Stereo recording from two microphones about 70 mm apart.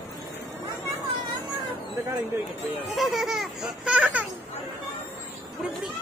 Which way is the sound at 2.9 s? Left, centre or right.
Centre.